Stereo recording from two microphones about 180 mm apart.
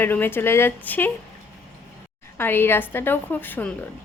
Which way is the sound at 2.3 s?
10° left (ahead or behind).